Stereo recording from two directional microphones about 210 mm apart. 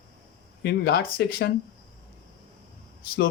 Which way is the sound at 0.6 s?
50° left (ahead or behind).